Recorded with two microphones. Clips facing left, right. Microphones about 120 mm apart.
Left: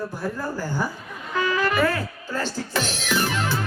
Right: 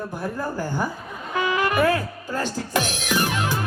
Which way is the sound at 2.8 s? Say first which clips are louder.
Right 1 dB; 50° right (ahead or behind).